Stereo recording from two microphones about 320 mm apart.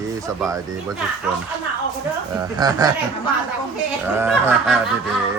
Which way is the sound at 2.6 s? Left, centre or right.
Centre.